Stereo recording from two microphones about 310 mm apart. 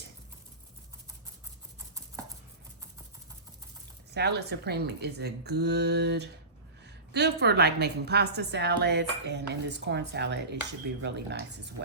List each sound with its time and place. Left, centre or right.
4.1 s a woman's voice: right